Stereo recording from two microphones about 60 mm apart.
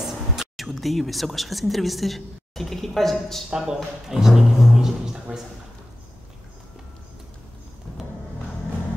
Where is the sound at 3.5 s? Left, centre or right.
Centre.